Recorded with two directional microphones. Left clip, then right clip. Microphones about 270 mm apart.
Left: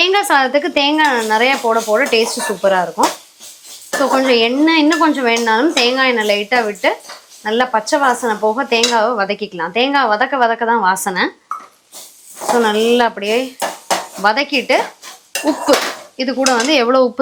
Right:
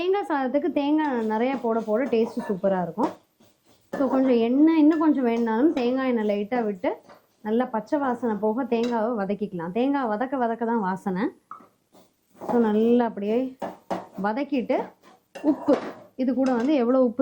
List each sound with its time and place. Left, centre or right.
0.0 s speech: centre
3.9 s a woman's voice: centre